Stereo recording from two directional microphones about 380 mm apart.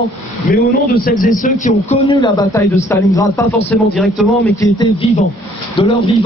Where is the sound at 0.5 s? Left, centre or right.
Left.